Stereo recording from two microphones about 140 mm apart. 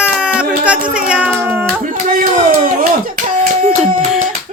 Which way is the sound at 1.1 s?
10° right (ahead or behind).